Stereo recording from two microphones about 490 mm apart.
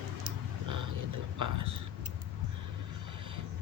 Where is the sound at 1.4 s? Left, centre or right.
Right.